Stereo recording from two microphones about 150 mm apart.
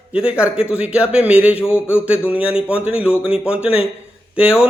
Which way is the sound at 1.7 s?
15° left (ahead or behind).